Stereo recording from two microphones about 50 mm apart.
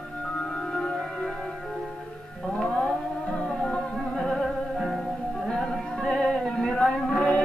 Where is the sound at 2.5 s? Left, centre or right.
Centre.